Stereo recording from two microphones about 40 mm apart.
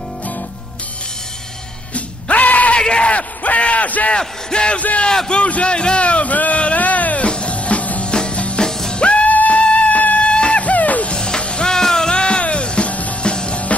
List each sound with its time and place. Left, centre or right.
2.0 s music: left
2.8 s yell: left
3.1 s bellow: left
4.2 s speech: left
4.7 s a man's voice: left
5.0 s a man's voice: left
6.6 s a sound: left
7.2 s music: left
8.0 s music: left
8.6 s music: centre
9.0 s music: left
10.6 s music: left
11.1 s music: left
13.2 s music: left